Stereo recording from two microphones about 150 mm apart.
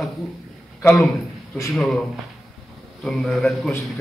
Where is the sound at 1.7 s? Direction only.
Centre (ahead or behind).